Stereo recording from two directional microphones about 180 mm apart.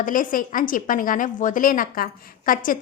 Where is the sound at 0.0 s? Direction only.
50° left (ahead or behind).